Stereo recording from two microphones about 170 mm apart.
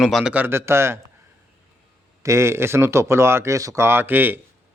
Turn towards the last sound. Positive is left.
turn(degrees=-10)  # may be behind; listen again after turning